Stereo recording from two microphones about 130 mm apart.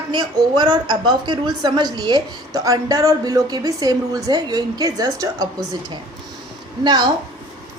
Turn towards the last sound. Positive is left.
turn(degrees=-35)  # may be behind; listen again after turning